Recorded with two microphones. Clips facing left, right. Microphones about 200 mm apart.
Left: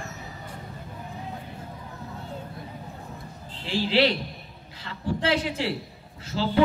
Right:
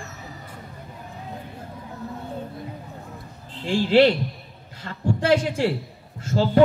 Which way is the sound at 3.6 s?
50° right (ahead or behind).